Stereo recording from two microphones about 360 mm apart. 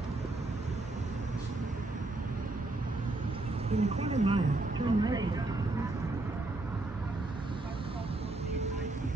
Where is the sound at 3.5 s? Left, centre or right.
Centre.